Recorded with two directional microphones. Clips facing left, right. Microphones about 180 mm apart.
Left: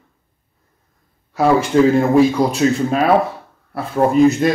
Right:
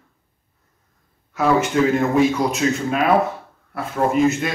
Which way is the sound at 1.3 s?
35° left (ahead or behind).